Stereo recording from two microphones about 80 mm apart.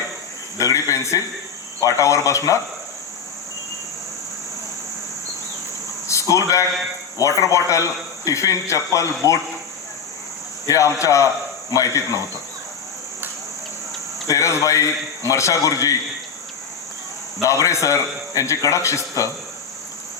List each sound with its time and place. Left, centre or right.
0.6 s a man's voice: left
6.1 s a sound: left
7.2 s a man's voice: left
10.7 s a man's voice: left
14.3 s a man's voice: left
17.4 s a man's voice: left